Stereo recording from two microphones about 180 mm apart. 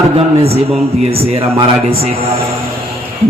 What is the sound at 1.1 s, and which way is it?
Speech, 35° right (ahead or behind).